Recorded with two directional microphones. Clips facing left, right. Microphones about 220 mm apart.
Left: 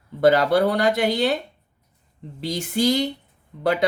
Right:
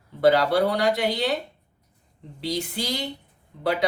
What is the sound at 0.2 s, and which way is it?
Speech, 45° left (ahead or behind).